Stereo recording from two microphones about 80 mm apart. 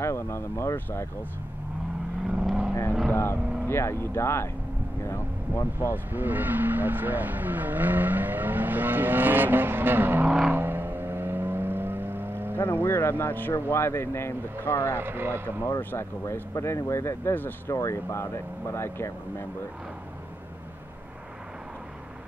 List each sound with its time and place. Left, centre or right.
0.0 s speech: left
2.3 s vehicle: centre
3.1 s speech: left
5.6 s speech: left
6.1 s speech: right
10.5 s vehicle: right
12.5 s speech: left
15.0 s speech: right
15.8 s speech: left
16.3 s speech: left
17.7 s speech: left